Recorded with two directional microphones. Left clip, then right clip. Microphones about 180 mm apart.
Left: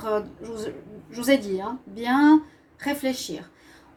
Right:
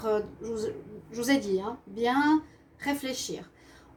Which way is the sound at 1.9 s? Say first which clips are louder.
Left 6 dB; 35° left (ahead or behind).